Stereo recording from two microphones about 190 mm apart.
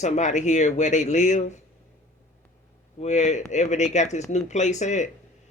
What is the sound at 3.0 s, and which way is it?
Speech, 40° left (ahead or behind).